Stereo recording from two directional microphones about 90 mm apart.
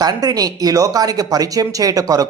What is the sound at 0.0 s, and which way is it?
Speech, 45° right (ahead or behind).